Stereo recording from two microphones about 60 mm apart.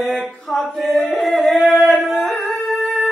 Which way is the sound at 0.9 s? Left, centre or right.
Centre.